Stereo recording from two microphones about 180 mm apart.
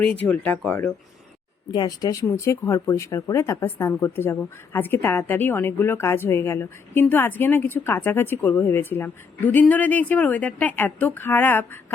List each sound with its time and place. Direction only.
0.3 s speech: 10° left (ahead or behind)
1.7 s speech: 20° left (ahead or behind)